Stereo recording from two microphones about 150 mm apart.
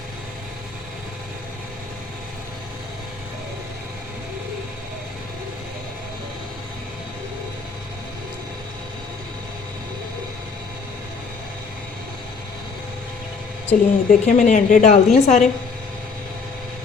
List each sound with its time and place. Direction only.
13.7 s a woman's voice: 55° left (ahead or behind)